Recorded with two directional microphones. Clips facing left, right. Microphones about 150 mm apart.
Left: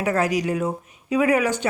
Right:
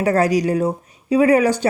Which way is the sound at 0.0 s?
35° right (ahead or behind).